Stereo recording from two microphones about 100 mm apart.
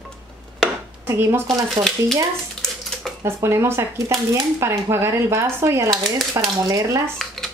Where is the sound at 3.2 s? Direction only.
25° right (ahead or behind).